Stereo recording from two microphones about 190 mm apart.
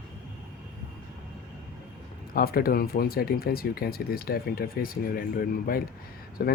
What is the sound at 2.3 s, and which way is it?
Speech, 50° left (ahead or behind).